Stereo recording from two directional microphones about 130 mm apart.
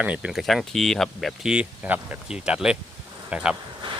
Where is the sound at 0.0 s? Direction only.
10° right (ahead or behind).